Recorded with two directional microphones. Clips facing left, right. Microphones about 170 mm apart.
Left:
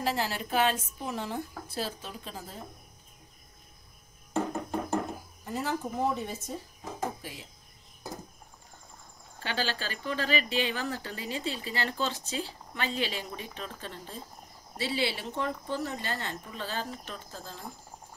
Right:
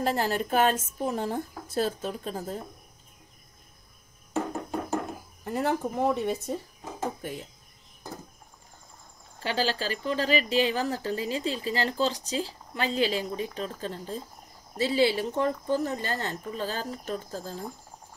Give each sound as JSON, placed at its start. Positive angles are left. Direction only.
{"t": 0.0, "sound": "a woman's voice", "side_deg": -45}
{"t": 5.4, "sound": "speech", "side_deg": -60}
{"t": 7.2, "sound": "speech", "side_deg": -50}
{"t": 9.4, "sound": "a woman's voice", "side_deg": -35}